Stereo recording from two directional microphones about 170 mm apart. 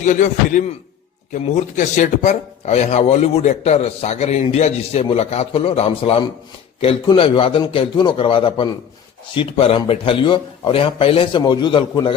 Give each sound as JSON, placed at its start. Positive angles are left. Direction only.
{"t": 0.0, "sound": "speech", "side_deg": 50}